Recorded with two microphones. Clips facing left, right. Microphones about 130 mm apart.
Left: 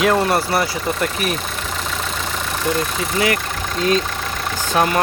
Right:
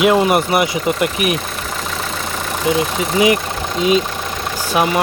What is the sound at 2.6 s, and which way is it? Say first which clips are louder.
Speech: right 5 dB; 10° right (ahead or behind).